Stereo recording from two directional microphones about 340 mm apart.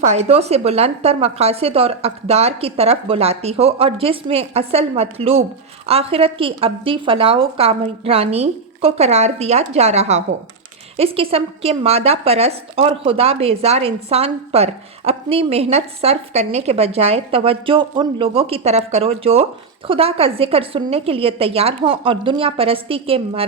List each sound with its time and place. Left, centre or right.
0.0 s a woman's voice: centre